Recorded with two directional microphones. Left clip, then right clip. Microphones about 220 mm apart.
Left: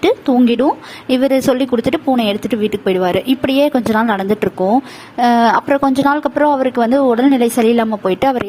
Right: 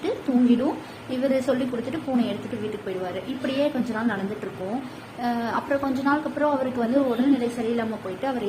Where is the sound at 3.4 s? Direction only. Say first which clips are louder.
Left 9 dB; 50° left (ahead or behind).